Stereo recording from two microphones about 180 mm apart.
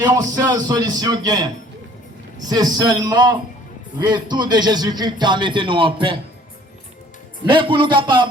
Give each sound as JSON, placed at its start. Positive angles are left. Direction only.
{"t": 0.0, "sound": "a man's voice", "side_deg": -20}
{"t": 7.4, "sound": "a man's voice", "side_deg": -30}